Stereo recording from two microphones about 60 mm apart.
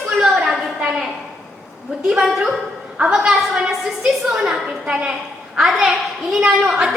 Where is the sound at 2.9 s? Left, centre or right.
Centre.